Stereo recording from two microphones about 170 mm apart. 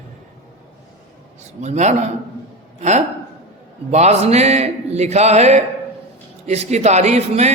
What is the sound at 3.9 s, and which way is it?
A man's voice, 40° right (ahead or behind).